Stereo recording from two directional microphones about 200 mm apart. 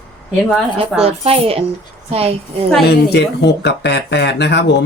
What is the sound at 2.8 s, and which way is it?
Speech, 55° left (ahead or behind).